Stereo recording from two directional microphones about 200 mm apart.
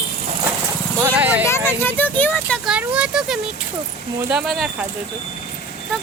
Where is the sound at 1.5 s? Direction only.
10° left (ahead or behind).